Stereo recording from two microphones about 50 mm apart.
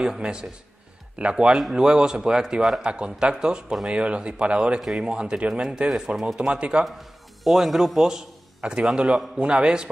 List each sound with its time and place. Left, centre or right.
0.0 s speech: centre
1.5 s speech: centre
1.9 s speech: centre
4.8 s speech: centre
6.8 s a man's voice: centre
9.4 s speech: right